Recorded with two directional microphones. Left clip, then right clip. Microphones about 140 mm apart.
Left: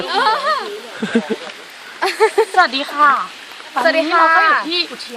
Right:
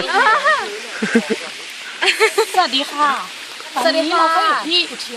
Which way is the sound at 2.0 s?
30° left (ahead or behind).